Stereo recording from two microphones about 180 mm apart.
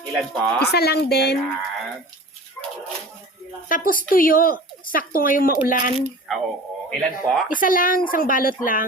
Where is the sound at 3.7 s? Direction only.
50° left (ahead or behind).